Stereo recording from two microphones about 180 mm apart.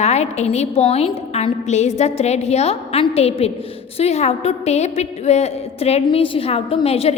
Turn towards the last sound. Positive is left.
turn(degrees=35)  # may be behind; listen again after turning